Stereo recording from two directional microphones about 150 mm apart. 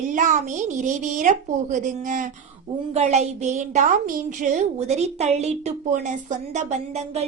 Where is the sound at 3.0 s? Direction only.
50° right (ahead or behind).